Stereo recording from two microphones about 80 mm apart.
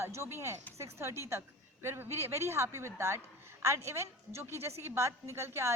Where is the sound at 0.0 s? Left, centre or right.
Right.